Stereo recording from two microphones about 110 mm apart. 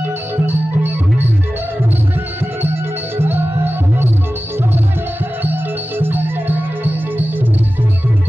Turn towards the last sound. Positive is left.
turn(degrees=-20)  # may be behind; listen again after turning